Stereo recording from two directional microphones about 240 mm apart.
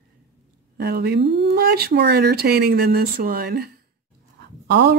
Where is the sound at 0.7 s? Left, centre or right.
Right.